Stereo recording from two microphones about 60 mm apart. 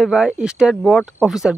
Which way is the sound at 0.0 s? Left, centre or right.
Centre.